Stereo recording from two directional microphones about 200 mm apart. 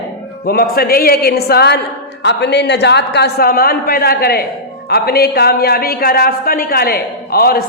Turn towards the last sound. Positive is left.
turn(degrees=50)  # may be behind; listen again after turning